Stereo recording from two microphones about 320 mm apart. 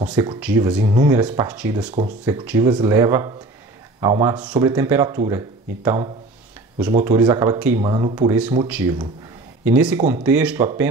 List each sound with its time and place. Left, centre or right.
0.0 s speech: centre